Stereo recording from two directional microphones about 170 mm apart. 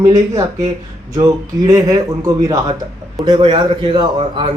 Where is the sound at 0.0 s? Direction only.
20° right (ahead or behind).